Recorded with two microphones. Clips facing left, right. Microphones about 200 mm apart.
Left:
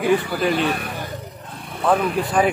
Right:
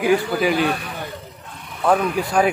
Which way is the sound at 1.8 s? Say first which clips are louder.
Right 1 dB; centre (ahead or behind).